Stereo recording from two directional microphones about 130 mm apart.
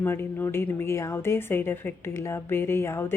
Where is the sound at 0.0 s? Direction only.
15° left (ahead or behind).